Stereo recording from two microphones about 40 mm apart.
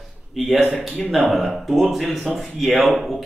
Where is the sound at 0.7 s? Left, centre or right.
Centre.